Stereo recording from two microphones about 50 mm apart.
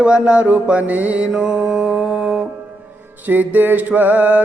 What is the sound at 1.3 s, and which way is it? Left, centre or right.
Mantra, centre.